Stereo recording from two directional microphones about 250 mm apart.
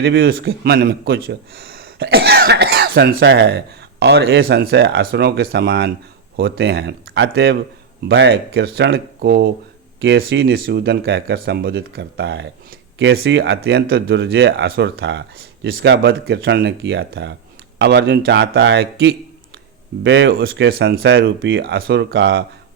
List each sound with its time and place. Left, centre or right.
0.0 s speech: right